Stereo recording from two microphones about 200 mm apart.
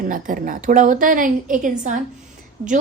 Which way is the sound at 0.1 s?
40° right (ahead or behind).